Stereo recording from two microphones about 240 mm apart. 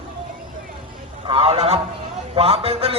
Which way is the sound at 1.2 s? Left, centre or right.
Right.